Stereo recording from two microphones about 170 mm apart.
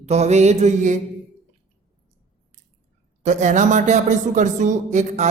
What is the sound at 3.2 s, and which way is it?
Speech, 45° right (ahead or behind).